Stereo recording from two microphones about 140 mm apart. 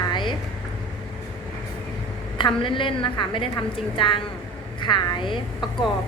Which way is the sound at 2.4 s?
35° left (ahead or behind).